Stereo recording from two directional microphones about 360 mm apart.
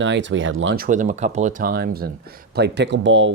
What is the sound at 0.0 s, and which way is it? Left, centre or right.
Speech, right.